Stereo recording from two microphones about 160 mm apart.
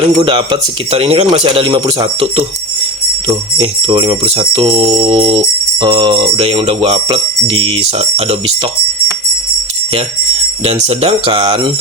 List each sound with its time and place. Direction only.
0.2 s jingle bell: 30° right (ahead or behind)
10.8 s jingle bell: 40° right (ahead or behind)